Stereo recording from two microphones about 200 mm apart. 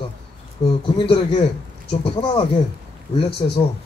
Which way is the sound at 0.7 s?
25° left (ahead or behind).